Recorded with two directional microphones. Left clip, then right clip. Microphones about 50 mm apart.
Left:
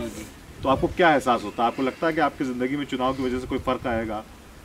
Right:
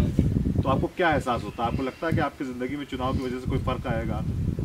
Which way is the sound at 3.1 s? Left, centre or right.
Centre.